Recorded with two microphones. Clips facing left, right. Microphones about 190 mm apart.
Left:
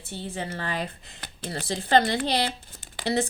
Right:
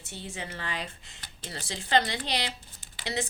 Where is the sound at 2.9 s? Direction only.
35° left (ahead or behind).